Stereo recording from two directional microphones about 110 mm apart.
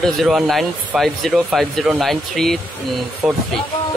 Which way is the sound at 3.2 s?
10° right (ahead or behind).